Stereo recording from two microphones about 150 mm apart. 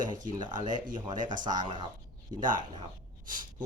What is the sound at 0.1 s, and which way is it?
Speech, 30° right (ahead or behind).